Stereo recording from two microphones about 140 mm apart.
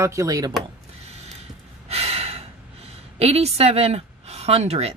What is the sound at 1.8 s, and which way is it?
Speech, 45° right (ahead or behind).